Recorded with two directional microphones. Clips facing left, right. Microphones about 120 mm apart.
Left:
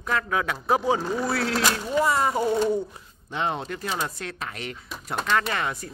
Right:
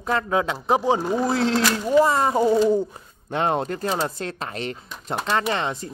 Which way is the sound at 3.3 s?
50° right (ahead or behind).